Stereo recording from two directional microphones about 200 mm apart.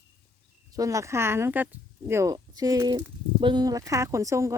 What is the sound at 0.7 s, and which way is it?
Speech, 15° right (ahead or behind).